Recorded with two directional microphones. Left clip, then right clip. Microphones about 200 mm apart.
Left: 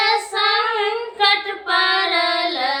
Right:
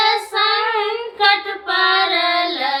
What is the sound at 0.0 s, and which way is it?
Child singing, 15° right (ahead or behind).